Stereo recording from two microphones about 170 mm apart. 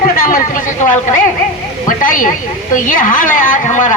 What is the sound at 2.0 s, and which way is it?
A woman's voice, 50° left (ahead or behind).